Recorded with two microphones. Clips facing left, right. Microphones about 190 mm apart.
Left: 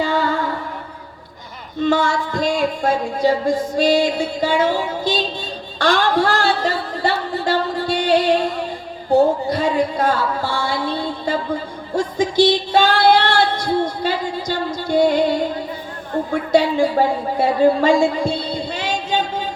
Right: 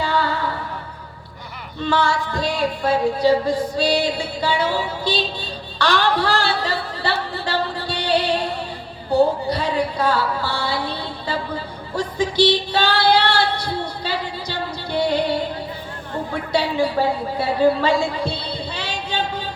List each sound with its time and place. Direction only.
0.0 s music: 45° left (ahead or behind)
1.8 s a woman's voice: 45° left (ahead or behind)
5.8 s a sound: 45° left (ahead or behind)
9.0 s music: 45° left (ahead or behind)
11.9 s singing: 45° left (ahead or behind)
16.3 s a woman's voice: 50° left (ahead or behind)